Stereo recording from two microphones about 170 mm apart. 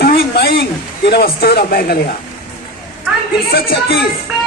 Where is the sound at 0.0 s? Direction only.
65° left (ahead or behind).